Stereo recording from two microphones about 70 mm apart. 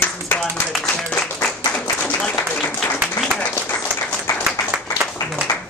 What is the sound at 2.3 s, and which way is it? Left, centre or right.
Applause, left.